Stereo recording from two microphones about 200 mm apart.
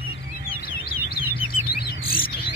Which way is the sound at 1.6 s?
50° left (ahead or behind).